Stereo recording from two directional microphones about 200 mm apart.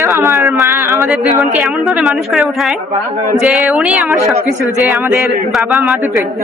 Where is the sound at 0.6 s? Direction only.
15° right (ahead or behind).